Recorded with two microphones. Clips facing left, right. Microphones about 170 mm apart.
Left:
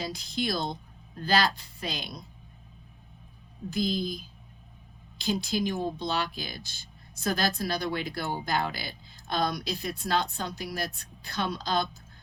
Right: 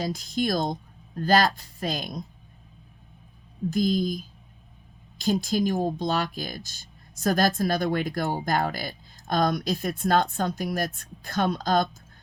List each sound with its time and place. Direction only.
0.0 s speech: 45° right (ahead or behind)
3.7 s speech: 45° right (ahead or behind)